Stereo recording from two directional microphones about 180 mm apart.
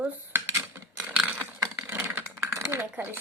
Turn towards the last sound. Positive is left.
turn(degrees=-10)  # may be behind; listen again after turning